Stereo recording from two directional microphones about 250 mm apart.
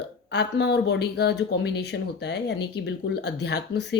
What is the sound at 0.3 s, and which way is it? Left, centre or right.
Speech, left.